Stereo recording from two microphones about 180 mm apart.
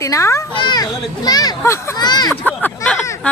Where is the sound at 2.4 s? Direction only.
5° left (ahead or behind).